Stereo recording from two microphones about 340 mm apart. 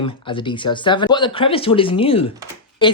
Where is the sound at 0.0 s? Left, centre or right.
Centre.